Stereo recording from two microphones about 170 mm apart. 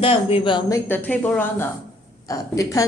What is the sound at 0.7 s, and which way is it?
Speech, 10° left (ahead or behind).